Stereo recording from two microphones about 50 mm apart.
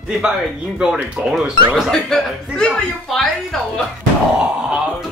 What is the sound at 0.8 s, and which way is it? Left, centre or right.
Speech, centre.